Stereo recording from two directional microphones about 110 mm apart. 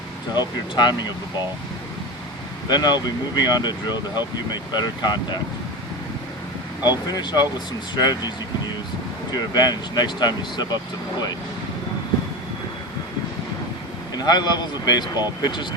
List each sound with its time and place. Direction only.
0.3 s speech: 40° left (ahead or behind)
2.6 s speech: 40° left (ahead or behind)
6.8 s speech: 35° left (ahead or behind)
9.3 s speech: 40° left (ahead or behind)
14.2 s speech: 40° left (ahead or behind)